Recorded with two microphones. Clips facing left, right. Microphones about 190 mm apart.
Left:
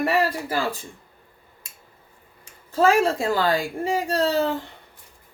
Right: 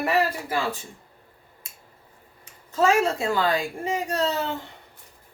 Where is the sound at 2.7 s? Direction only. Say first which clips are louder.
Left 2 dB; 30° left (ahead or behind).